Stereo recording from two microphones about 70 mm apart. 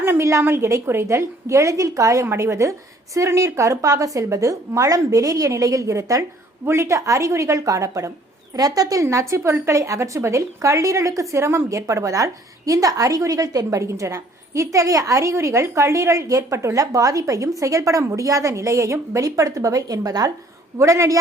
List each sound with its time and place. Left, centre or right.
0.0 s a woman's voice: right
20.7 s speech: right